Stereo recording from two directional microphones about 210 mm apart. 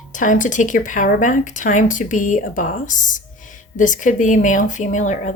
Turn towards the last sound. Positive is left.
turn(degrees=35)  # may be behind; listen again after turning